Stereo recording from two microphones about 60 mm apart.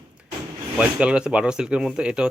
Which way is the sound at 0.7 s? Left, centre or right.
Centre.